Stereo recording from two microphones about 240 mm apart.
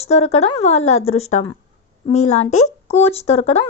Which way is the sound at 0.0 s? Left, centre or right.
Left.